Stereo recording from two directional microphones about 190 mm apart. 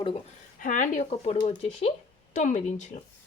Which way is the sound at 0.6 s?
40° left (ahead or behind).